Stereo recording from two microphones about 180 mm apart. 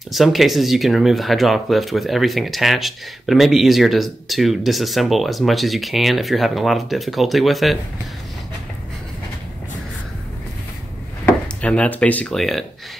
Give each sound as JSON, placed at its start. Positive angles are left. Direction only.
{"t": 0.1, "sound": "speech", "side_deg": 0}
{"t": 11.6, "sound": "speech", "side_deg": 5}